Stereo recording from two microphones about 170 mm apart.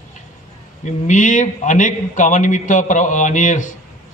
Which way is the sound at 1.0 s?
45° left (ahead or behind).